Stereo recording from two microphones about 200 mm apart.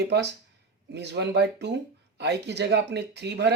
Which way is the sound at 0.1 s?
55° right (ahead or behind).